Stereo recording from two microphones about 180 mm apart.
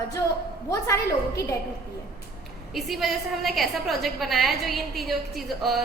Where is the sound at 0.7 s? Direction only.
15° left (ahead or behind).